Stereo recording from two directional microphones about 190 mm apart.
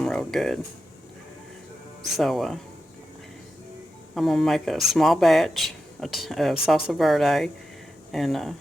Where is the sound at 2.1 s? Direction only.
Centre (ahead or behind).